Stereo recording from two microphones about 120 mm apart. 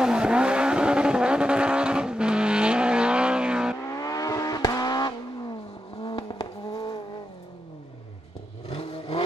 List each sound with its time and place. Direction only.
0.0 s vehicle: 5° right (ahead or behind)
4.0 s vehicle: 30° left (ahead or behind)
8.6 s vehicle: 55° left (ahead or behind)